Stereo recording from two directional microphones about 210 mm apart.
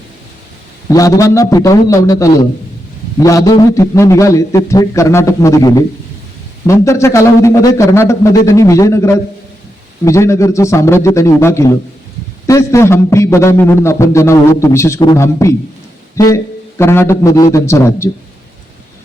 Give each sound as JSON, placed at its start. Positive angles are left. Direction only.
{"t": 0.9, "sound": "a man's voice", "side_deg": 15}